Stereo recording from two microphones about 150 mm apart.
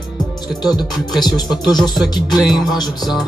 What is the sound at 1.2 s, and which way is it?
Music, 25° left (ahead or behind).